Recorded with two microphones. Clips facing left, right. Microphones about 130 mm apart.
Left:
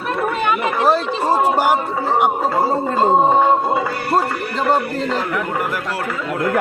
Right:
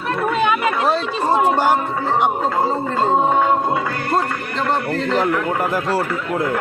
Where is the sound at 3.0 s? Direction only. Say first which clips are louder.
Left 3 dB; 20° left (ahead or behind).